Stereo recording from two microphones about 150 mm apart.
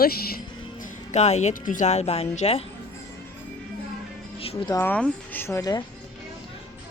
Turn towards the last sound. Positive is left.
turn(degrees=25)  # may be behind; listen again after turning